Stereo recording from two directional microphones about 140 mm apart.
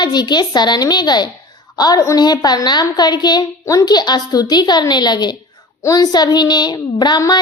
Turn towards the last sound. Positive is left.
turn(degrees=30)  # may be behind; listen again after turning